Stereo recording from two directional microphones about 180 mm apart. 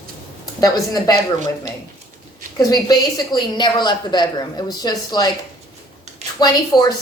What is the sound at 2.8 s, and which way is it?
Speech, 20° left (ahead or behind).